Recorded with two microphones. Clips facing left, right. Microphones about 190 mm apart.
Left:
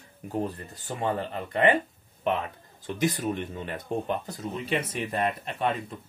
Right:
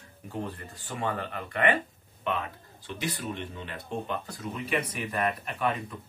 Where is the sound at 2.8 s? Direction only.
45° left (ahead or behind).